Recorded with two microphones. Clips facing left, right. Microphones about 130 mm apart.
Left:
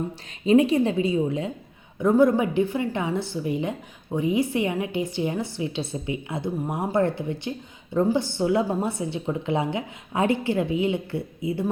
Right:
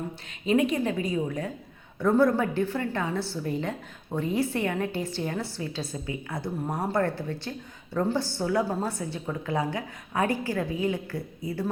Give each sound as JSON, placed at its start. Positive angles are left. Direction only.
{"t": 0.4, "sound": "a woman's voice", "side_deg": 30}